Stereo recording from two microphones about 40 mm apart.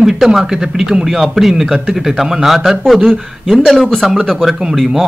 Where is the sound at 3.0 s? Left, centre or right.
Centre.